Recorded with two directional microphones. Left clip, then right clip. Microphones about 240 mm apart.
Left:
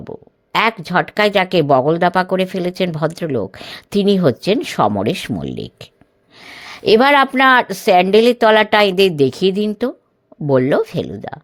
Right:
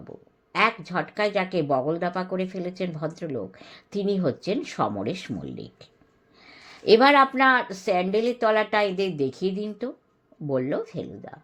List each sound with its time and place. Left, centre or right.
0.5 s speech: left